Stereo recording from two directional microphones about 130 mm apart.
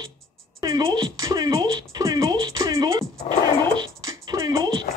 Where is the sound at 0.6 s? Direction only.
25° right (ahead or behind).